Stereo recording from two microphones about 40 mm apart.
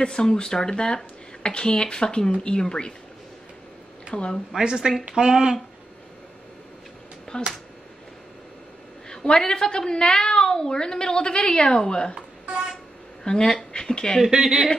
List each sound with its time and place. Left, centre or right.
0.0 s a woman's voice: centre
4.1 s speech: left
4.6 s speech: centre
7.3 s a woman's voice: left
9.1 s a woman's voice: centre
13.2 s speech: centre
14.2 s speech: centre